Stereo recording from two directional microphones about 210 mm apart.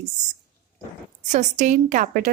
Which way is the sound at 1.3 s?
35° right (ahead or behind).